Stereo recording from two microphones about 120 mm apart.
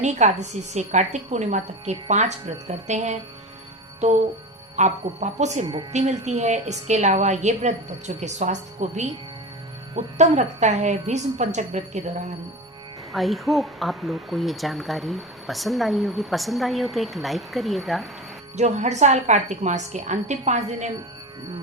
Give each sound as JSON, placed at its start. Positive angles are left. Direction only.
{"t": 0.0, "sound": "a woman's voice", "side_deg": -75}
{"t": 13.1, "sound": "speech", "side_deg": 0}
{"t": 18.5, "sound": "a woman's voice", "side_deg": -70}